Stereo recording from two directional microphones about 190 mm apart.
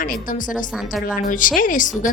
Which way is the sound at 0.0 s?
50° left (ahead or behind).